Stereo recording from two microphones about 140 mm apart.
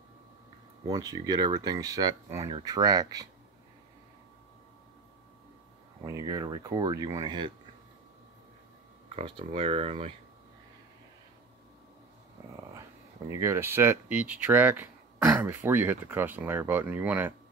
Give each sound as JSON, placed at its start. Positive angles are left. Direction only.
{"t": 0.8, "sound": "speech", "side_deg": -30}
{"t": 6.0, "sound": "speech", "side_deg": -25}
{"t": 9.1, "sound": "speech", "side_deg": -40}
{"t": 13.3, "sound": "speech", "side_deg": -20}